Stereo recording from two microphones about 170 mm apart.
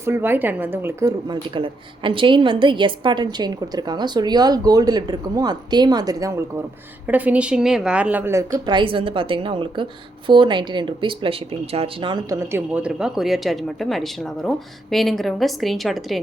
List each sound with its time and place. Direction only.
0.0 s a woman's voice: 15° right (ahead or behind)
8.5 s a woman's voice: 25° right (ahead or behind); by 16.2 s centre (ahead or behind)